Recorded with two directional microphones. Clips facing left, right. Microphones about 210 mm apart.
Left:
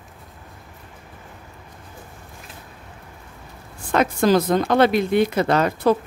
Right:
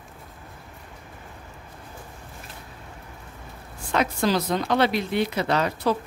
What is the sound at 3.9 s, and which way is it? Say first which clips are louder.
Speech: left 6 dB; 50° left (ahead or behind).